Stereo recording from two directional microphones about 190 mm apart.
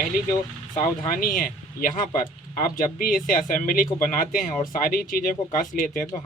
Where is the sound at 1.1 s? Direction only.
45° left (ahead or behind).